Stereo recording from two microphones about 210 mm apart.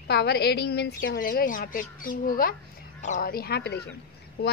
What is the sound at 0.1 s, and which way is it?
A woman's voice, 50° left (ahead or behind).